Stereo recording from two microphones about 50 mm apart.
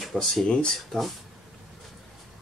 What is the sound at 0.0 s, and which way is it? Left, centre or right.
Speech, centre.